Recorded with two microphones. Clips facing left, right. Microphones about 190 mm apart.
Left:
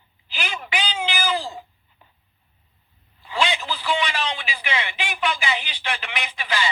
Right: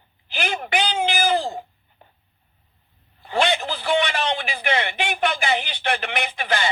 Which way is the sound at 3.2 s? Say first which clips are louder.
Right 3 dB; 55° right (ahead or behind).